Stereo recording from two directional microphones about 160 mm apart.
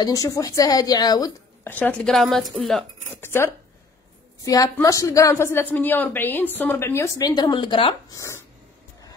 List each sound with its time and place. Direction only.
0.0 s a woman's voice: 20° left (ahead or behind)
1.7 s speech: 10° left (ahead or behind)
3.2 s a woman's voice: 15° left (ahead or behind); by 7.9 s 30° left (ahead or behind)
8.2 s a sound: 15° left (ahead or behind)